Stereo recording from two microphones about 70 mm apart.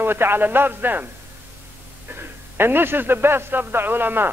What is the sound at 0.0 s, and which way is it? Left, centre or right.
Speech, right.